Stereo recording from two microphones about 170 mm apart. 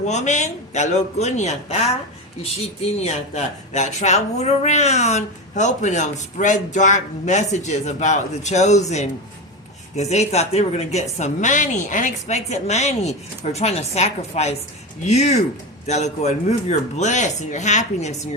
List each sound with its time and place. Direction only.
0.0 s speech: 45° left (ahead or behind)
9.9 s a woman's voice: 40° left (ahead or behind)